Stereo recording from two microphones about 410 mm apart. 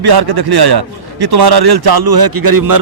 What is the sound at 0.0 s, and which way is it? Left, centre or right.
A man's voice, right.